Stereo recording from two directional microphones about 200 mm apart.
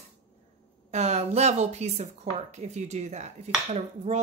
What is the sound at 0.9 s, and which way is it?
Speech, 35° right (ahead or behind).